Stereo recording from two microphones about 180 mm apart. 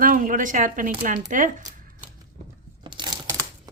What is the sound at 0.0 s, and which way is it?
Speech, 50° right (ahead or behind).